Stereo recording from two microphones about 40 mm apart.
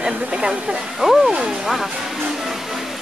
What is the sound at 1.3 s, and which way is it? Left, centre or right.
Speech, right.